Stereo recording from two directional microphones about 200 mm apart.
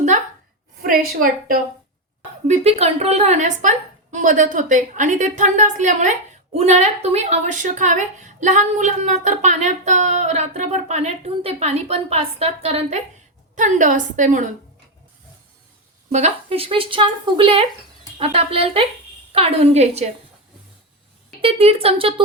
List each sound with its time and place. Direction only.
0.8 s a woman's voice: 45° right (ahead or behind)
2.5 s a woman's voice: 30° right (ahead or behind)
16.1 s a woman's voice: 30° right (ahead or behind)
21.4 s speech: 30° right (ahead or behind)